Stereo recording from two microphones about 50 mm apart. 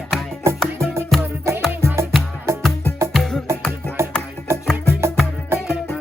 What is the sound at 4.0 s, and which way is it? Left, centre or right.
Music, right.